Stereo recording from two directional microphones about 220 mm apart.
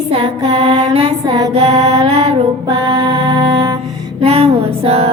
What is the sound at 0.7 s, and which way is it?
Mantra, 25° right (ahead or behind).